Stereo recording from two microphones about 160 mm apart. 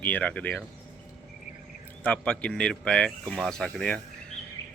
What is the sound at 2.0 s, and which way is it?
Speech, 5° left (ahead or behind).